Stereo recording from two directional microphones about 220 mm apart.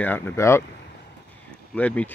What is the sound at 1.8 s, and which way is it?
Speech, 5° left (ahead or behind).